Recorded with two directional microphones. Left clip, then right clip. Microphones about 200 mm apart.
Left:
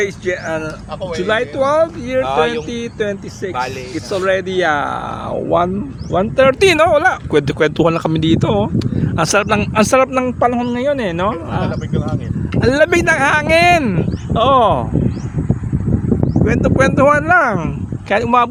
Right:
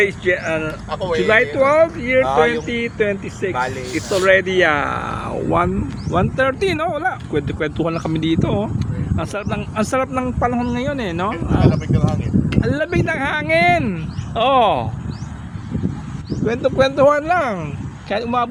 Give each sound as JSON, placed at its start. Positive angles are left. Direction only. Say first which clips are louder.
{"t": 0.3, "sound": "speech", "louder": "right 1 dB", "side_deg": 10}
{"t": 2.2, "sound": "speech", "louder": "left 1 dB", "side_deg": 45}
{"t": 2.6, "sound": "speech", "louder": "right 1 dB", "side_deg": 15}
{"t": 6.3, "sound": "speech", "louder": "left 11 dB", "side_deg": 50}
{"t": 9.1, "sound": "speech", "louder": "left 11 dB", "side_deg": 50}
{"t": 11.6, "sound": "speech", "louder": "right 2 dB", "side_deg": -35}
{"t": 12.6, "sound": "speech", "louder": "left 11 dB", "side_deg": 60}
{"t": 16.5, "sound": "speech", "louder": "left 1 dB", "side_deg": 15}
{"t": 18.1, "sound": "speech", "louder": "left 7 dB", "side_deg": 40}